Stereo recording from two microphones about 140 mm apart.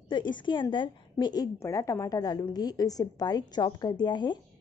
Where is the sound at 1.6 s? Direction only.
20° left (ahead or behind).